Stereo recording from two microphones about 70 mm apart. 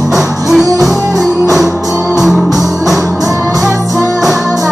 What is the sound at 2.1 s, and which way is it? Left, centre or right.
Music, centre.